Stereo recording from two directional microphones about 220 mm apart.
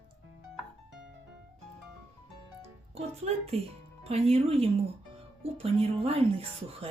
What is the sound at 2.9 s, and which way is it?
Speech, 30° right (ahead or behind).